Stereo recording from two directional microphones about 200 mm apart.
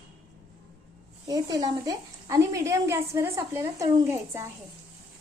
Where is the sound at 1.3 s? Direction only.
20° right (ahead or behind).